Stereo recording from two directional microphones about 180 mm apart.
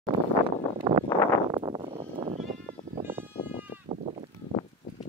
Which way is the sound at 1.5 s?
25° right (ahead or behind).